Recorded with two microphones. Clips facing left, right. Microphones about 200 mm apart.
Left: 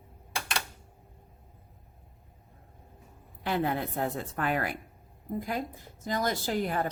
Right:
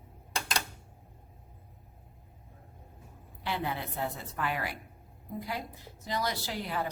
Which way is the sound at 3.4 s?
50° left (ahead or behind).